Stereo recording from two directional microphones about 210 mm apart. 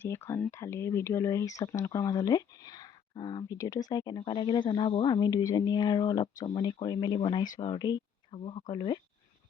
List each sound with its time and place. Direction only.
0.0 s speech: 10° left (ahead or behind)